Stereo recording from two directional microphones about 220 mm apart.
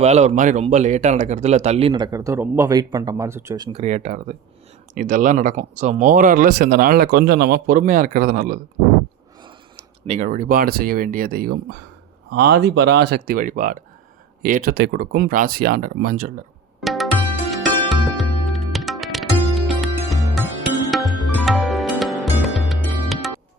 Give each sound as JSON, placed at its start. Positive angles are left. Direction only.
{"t": 0.0, "sound": "speech", "side_deg": -30}
{"t": 10.1, "sound": "speech", "side_deg": -35}
{"t": 16.8, "sound": "music", "side_deg": 0}